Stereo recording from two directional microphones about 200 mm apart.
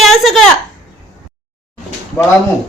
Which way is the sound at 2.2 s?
15° left (ahead or behind).